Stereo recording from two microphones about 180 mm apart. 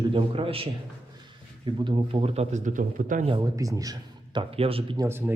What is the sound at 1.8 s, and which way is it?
Speech, 35° right (ahead or behind).